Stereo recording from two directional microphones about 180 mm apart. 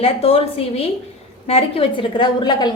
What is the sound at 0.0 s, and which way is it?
A woman's voice, 35° left (ahead or behind).